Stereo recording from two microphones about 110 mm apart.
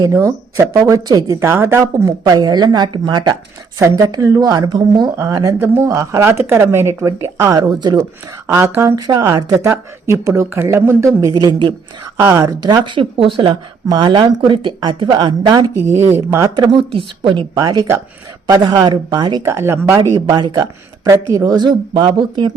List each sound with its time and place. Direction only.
0.0 s a woman's voice: 30° right (ahead or behind)
3.8 s a woman's voice: 25° right (ahead or behind)
5.5 s a woman's voice: 20° right (ahead or behind)
9.0 s a woman's voice: 35° right (ahead or behind)
11.3 s speech: 40° right (ahead or behind)
12.2 s speech: 30° right (ahead or behind)
12.8 s speech: 50° right (ahead or behind)
15.9 s a woman's voice: 25° right (ahead or behind)
16.6 s speech: 55° right (ahead or behind)
17.5 s speech: 35° right (ahead or behind)
19.4 s a woman's voice: 25° right (ahead or behind)
20.0 s speech: 40° right (ahead or behind)